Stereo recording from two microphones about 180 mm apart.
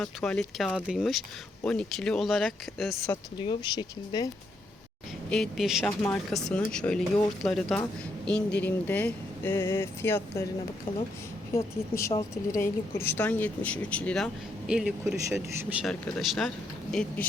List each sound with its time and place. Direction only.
0.0 s speech: 5° left (ahead or behind)
3.3 s speech: 25° left (ahead or behind)
5.3 s speech: centre (ahead or behind)
11.5 s speech: 15° left (ahead or behind)
12.1 s speech: 30° left (ahead or behind)
12.5 s speech: 15° left (ahead or behind); by 14.9 s 5° right (ahead or behind)
15.0 s speech: 15° right (ahead or behind)
15.8 s speech: centre (ahead or behind)